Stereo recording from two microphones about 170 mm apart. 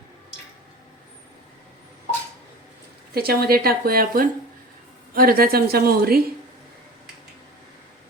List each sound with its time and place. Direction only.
3.2 s speech: 65° right (ahead or behind)